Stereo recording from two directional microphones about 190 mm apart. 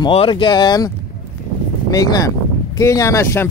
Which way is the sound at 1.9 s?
20° left (ahead or behind).